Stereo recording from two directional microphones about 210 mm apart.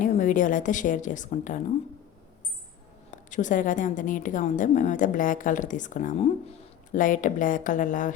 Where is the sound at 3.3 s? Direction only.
35° left (ahead or behind).